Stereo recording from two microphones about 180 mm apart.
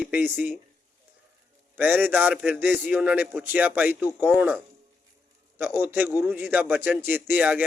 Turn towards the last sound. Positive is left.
turn(degrees=-10)  # may be behind; listen again after turning